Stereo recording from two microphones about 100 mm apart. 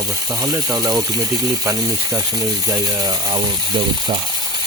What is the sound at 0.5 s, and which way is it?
Speech, 35° right (ahead or behind).